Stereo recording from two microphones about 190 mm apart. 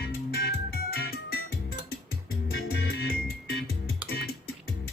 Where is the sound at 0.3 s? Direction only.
60° left (ahead or behind).